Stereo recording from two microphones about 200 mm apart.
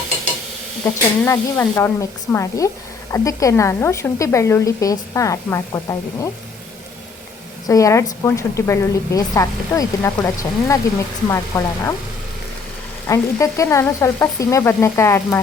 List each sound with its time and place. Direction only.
0.9 s a woman's voice: 10° left (ahead or behind)
7.7 s a woman's voice: 15° left (ahead or behind)
13.1 s a woman's voice: 15° left (ahead or behind)